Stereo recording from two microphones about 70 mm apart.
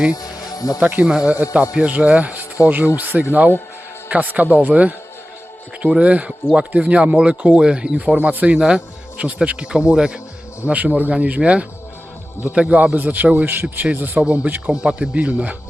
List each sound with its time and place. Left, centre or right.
0.1 s music: left
0.8 s a man's voice: centre
8.5 s speech: centre
10.7 s a man's voice: right